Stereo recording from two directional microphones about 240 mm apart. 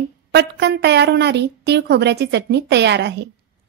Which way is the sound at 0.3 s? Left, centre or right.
Right.